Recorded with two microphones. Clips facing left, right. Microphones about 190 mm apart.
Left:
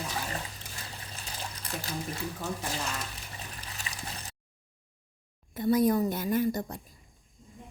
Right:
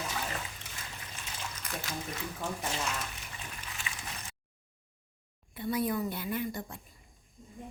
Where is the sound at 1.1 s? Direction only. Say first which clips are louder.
Left 2 dB; 35° left (ahead or behind).